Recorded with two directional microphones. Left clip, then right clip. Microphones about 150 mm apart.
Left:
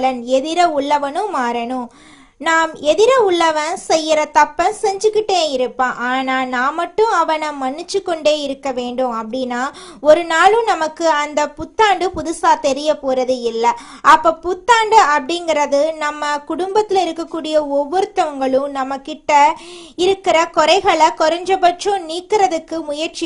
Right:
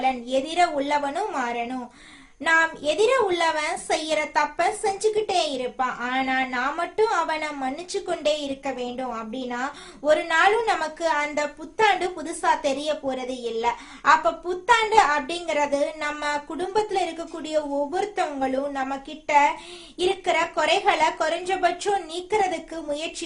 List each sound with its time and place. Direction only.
0.0 s a child's voice: 50° left (ahead or behind)